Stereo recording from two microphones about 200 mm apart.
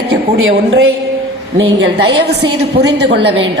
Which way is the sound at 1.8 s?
60° right (ahead or behind).